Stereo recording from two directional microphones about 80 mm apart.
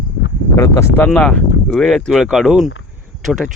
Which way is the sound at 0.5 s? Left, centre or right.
Left.